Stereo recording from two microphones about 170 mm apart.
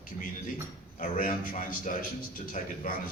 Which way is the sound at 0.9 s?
50° left (ahead or behind).